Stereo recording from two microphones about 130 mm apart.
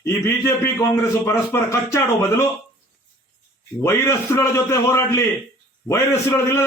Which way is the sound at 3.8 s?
20° left (ahead or behind).